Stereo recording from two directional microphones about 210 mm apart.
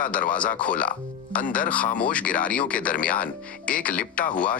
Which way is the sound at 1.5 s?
40° left (ahead or behind).